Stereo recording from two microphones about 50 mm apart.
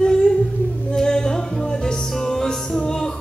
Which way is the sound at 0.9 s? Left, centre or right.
Centre.